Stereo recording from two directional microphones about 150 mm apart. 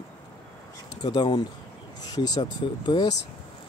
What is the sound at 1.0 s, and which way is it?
Speech, 30° left (ahead or behind).